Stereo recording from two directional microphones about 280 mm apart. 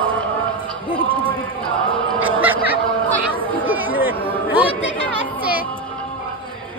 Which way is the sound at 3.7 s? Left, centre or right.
Centre.